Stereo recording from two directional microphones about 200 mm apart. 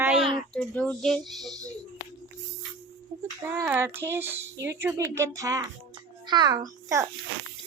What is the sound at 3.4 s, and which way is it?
A child's voice, 10° right (ahead or behind).